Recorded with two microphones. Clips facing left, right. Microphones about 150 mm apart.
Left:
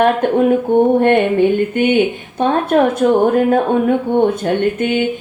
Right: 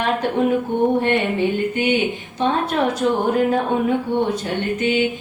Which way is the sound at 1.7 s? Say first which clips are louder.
Left 6 dB; 55° left (ahead or behind).